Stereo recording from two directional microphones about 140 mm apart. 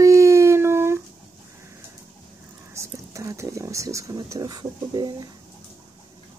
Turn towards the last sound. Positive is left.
turn(degrees=-30)  # may be behind; listen again after turning